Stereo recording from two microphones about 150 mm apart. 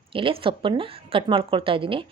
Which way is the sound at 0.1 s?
35° right (ahead or behind).